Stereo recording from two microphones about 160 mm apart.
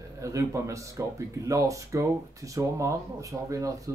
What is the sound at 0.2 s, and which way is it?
Speech, 20° right (ahead or behind).